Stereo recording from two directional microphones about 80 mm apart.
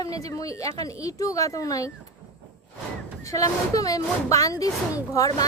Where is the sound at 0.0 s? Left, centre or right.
Left.